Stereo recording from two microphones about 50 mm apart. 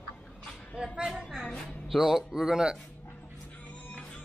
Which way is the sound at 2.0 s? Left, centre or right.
Centre.